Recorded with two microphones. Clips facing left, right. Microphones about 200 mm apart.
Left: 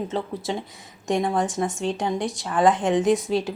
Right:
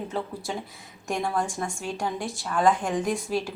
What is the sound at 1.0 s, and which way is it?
Speech, 20° left (ahead or behind).